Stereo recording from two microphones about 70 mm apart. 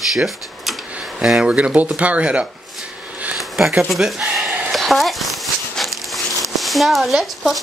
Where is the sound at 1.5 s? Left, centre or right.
Centre.